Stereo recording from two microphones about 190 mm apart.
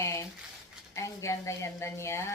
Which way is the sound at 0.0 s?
15° left (ahead or behind).